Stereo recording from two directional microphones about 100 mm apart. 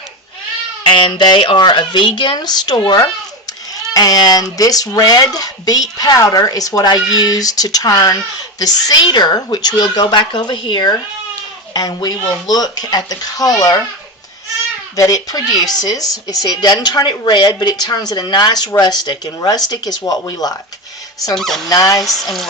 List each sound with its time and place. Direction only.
0.9 s a child's voice: 55° left (ahead or behind); by 13.5 s 40° left (ahead or behind)
14.9 s speech: 35° left (ahead or behind)
21.3 s speech: 5° left (ahead or behind)
21.7 s speech: 35° left (ahead or behind)
22.0 s speech: centre (ahead or behind)